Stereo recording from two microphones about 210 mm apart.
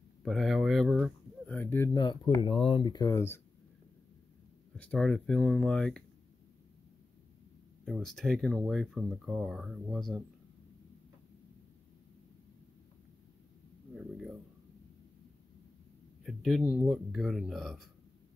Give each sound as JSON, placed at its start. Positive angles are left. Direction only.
{"t": 0.2, "sound": "speech", "side_deg": 0}
{"t": 2.0, "sound": "speech", "side_deg": 20}
{"t": 4.7, "sound": "speech", "side_deg": 5}
{"t": 7.8, "sound": "speech", "side_deg": 0}
{"t": 13.9, "sound": "speech", "side_deg": 0}
{"t": 16.3, "sound": "speech", "side_deg": 0}